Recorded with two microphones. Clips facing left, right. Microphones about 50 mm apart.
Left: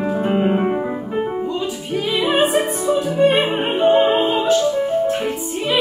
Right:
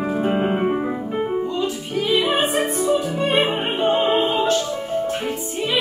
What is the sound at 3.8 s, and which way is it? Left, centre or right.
Opera, left.